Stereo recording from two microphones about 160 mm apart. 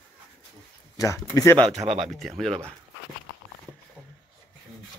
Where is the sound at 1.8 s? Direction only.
40° right (ahead or behind).